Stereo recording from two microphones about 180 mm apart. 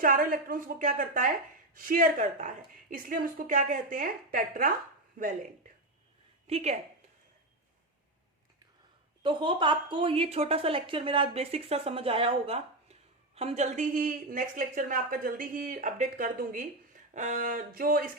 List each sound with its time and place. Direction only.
0.0 s a woman's voice: 50° right (ahead or behind)
6.5 s a woman's voice: 40° right (ahead or behind)
9.2 s a woman's voice: 30° right (ahead or behind); by 18.1 s 50° right (ahead or behind)